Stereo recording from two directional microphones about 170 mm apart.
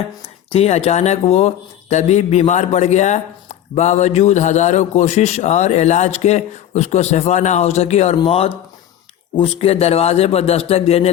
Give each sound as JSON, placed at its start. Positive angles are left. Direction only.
{"t": 0.5, "sound": "speech", "side_deg": 35}